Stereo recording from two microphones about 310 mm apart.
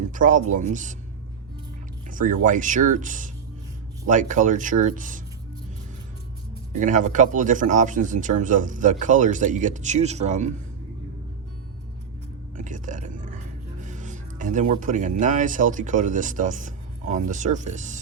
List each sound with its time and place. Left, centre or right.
0.1 s speech: right
2.0 s speech: right
6.7 s speech: right
12.5 s speech: right